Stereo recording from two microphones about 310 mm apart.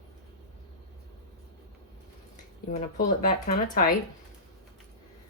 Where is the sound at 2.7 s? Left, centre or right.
Left.